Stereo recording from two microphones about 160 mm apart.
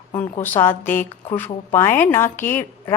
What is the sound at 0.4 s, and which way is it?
A woman's voice, 15° left (ahead or behind).